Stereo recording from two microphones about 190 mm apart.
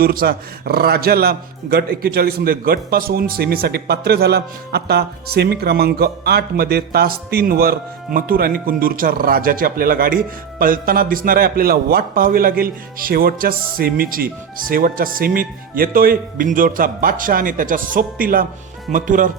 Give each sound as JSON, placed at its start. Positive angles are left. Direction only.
{"t": 0.0, "sound": "a man's voice", "side_deg": -50}